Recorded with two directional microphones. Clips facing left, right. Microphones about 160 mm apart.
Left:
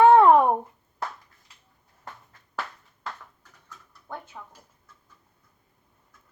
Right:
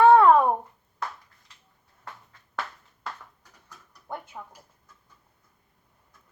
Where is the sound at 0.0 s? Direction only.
20° left (ahead or behind).